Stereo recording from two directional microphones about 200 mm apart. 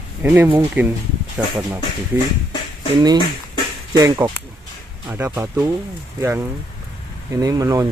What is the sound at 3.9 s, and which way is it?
Speech, 20° right (ahead or behind).